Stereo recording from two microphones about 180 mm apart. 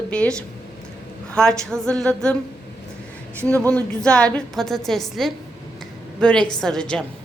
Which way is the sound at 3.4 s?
10° left (ahead or behind).